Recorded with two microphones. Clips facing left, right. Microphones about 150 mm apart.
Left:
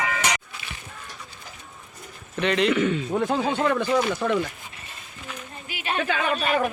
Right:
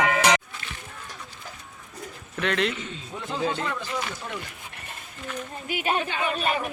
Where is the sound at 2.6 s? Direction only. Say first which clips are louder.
Left 10 dB; 70° left (ahead or behind).